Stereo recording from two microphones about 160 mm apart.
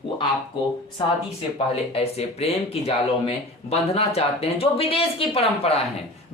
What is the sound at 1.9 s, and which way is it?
Speech, 40° left (ahead or behind).